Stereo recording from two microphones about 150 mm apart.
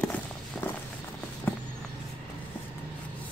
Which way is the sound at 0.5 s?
5° left (ahead or behind).